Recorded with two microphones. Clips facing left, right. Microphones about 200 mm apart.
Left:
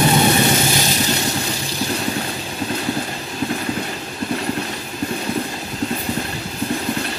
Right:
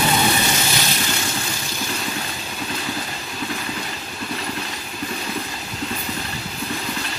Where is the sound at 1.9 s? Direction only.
35° left (ahead or behind).